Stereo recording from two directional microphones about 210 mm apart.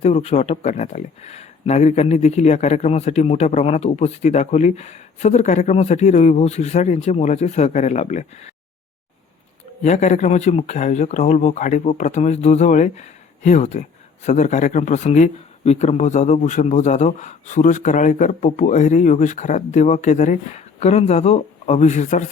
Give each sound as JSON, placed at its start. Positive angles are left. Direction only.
{"t": 0.0, "sound": "speech", "side_deg": 30}
{"t": 9.8, "sound": "speech", "side_deg": 35}